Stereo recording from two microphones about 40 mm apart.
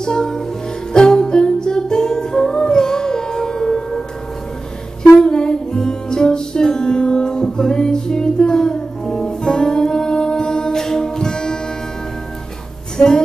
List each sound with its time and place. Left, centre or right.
0.0 s music: centre
5.2 s music: centre
12.9 s music: centre